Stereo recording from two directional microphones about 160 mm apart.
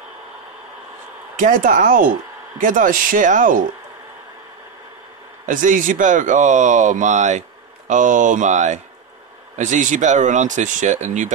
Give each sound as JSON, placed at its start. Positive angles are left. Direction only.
{"t": 1.4, "sound": "speech", "side_deg": -55}
{"t": 5.5, "sound": "speech", "side_deg": -55}